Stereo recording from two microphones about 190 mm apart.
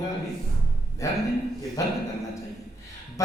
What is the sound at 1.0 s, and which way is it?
Speech, 15° left (ahead or behind).